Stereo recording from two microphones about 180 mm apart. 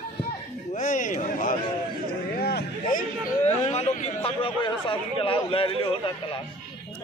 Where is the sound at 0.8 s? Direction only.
45° left (ahead or behind).